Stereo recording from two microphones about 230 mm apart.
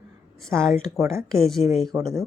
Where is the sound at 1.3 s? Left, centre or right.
Centre.